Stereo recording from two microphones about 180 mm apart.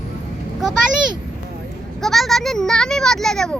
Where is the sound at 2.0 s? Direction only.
Centre (ahead or behind).